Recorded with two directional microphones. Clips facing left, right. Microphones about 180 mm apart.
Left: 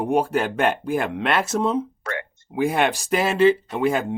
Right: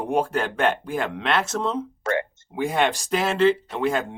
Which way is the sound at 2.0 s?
30° right (ahead or behind).